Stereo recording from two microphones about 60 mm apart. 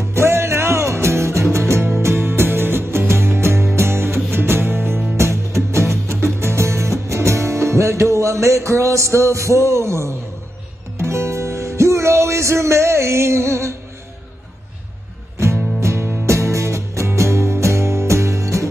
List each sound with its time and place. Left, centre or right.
0.0 s music: right
5.1 s music: right
6.4 s music: right
15.3 s music: right